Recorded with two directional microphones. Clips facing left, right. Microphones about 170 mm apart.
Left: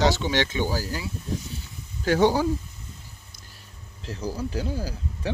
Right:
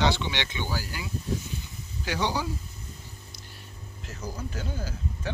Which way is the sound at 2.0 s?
45° left (ahead or behind).